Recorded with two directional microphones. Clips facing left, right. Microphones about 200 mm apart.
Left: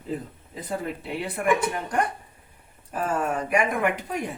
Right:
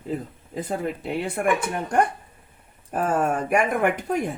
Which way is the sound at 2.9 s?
50° right (ahead or behind).